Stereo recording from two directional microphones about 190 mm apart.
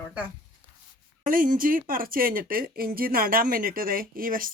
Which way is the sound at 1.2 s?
45° right (ahead or behind).